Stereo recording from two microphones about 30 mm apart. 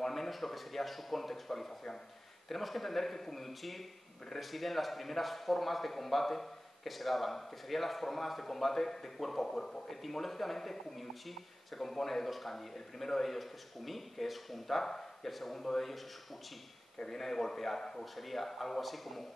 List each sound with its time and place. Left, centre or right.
0.0 s a man's voice: centre
17.1 s a man's voice: centre
18.1 s a man's voice: centre